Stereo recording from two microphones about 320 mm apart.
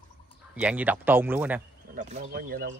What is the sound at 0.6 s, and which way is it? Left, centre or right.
Speech, centre.